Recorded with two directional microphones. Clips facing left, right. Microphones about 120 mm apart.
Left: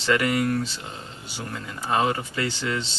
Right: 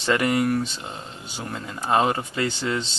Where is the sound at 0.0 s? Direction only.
25° right (ahead or behind).